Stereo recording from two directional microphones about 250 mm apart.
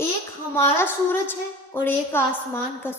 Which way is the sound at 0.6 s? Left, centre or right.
Centre.